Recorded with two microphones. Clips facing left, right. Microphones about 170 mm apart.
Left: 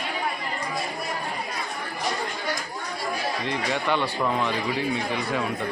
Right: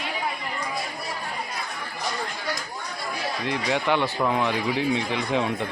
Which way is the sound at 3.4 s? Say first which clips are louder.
Right 4 dB; 15° right (ahead or behind).